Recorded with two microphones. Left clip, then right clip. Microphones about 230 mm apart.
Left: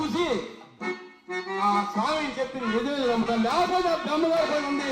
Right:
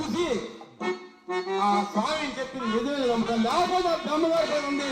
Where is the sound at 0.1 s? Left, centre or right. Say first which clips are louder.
Right 2 dB; centre.